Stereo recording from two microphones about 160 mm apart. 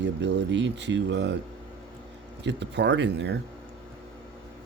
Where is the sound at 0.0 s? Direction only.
90° right.